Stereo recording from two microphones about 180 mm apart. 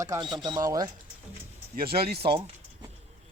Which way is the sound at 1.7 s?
60° right (ahead or behind).